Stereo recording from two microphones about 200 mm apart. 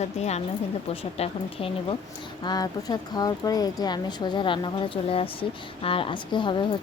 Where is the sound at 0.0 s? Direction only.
35° left (ahead or behind).